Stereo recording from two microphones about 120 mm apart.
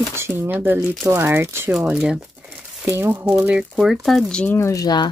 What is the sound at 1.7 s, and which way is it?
Speech, 5° right (ahead or behind).